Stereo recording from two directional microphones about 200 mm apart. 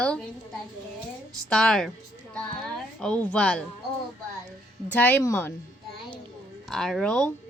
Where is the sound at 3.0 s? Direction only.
5° left (ahead or behind).